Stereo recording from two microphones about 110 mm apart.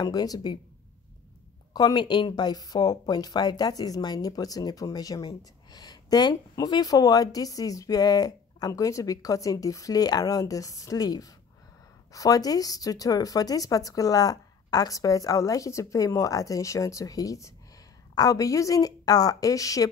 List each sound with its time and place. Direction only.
0.0 s speech: 35° left (ahead or behind)
1.7 s speech: 40° left (ahead or behind)